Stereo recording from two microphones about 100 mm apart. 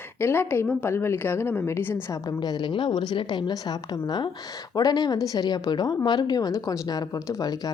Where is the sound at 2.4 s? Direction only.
45° left (ahead or behind).